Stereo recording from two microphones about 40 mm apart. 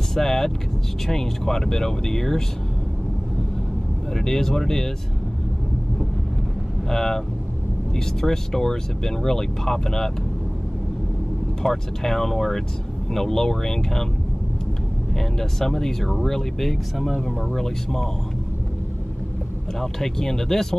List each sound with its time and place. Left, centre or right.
0.1 s speech: centre
4.1 s speech: centre
6.9 s speech: centre
11.6 s speech: centre
15.1 s speech: centre
19.8 s speech: centre